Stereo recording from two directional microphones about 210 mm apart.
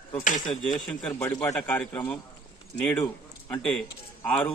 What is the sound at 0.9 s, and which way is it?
A man's voice, 5° left (ahead or behind).